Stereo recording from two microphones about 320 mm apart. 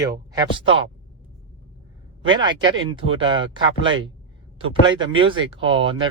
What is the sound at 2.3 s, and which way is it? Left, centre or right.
Speech, centre.